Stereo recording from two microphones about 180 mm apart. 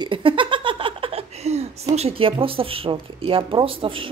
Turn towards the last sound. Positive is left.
turn(degrees=-30)  # may be behind; listen again after turning